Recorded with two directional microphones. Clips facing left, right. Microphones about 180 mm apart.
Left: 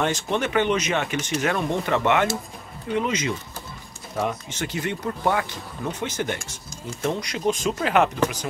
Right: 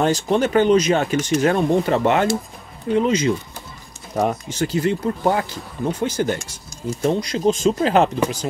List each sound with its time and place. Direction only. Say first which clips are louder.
0.0 s speech: right 6 dB; 35° right (ahead or behind)